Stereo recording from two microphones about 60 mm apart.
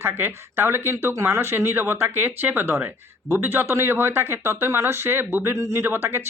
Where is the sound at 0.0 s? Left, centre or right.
Right.